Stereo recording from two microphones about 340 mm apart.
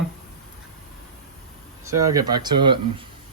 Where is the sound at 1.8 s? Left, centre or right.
Centre.